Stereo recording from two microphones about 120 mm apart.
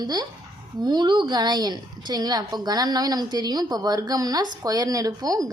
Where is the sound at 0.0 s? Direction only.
35° right (ahead or behind).